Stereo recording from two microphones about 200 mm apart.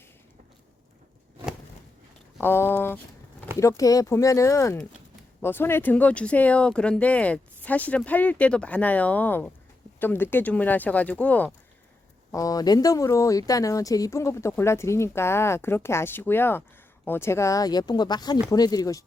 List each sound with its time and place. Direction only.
2.4 s speech: 10° left (ahead or behind)